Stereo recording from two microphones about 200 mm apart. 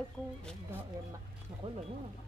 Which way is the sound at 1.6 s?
30° right (ahead or behind).